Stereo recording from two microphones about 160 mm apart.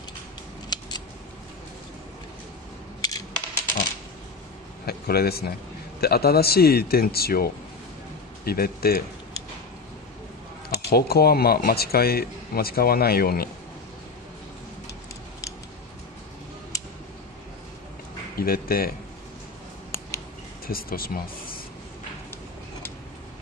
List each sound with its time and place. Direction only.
0.7 s scissors: 25° left (ahead or behind)
3.0 s a sound: 20° left (ahead or behind)
4.8 s a sound: 75° left (ahead or behind)
5.9 s speech: 75° left (ahead or behind)
10.9 s speech: 75° left (ahead or behind)
16.7 s tick-tock: 20° left (ahead or behind)
18.3 s speech: 70° left (ahead or behind)
20.6 s speech: 70° left (ahead or behind)